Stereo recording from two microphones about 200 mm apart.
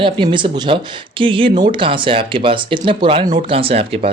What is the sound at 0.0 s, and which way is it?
Speech, 25° right (ahead or behind).